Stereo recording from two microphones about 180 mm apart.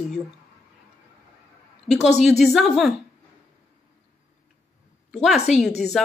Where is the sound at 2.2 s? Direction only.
Centre (ahead or behind).